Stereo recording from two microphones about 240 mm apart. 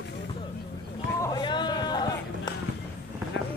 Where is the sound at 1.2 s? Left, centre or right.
Centre.